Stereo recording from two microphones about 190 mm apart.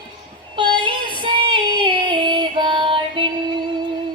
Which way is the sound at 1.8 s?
25° right (ahead or behind).